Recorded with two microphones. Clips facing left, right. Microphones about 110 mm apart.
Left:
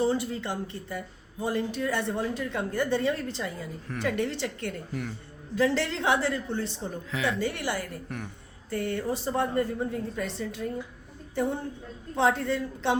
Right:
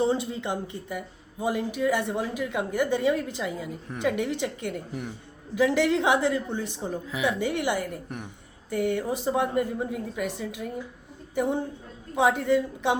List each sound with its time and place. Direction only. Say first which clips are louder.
0.0 s speech: right 1 dB; 20° right (ahead or behind)